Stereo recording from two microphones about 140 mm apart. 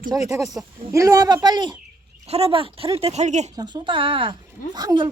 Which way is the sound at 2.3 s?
45° right (ahead or behind).